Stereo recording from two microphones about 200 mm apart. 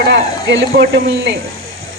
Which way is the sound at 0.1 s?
55° right (ahead or behind).